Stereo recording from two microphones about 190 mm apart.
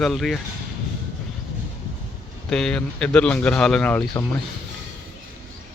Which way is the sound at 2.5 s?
5° left (ahead or behind).